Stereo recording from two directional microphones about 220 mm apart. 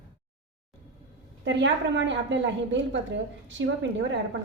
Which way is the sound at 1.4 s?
55° right (ahead or behind).